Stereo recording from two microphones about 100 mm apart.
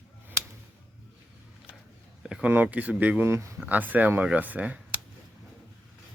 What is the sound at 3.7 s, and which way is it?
Speech, 15° right (ahead or behind).